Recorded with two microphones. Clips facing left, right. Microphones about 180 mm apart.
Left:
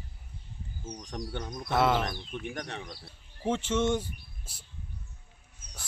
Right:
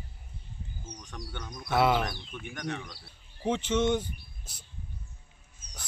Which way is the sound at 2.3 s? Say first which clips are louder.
Even; 35° left (ahead or behind).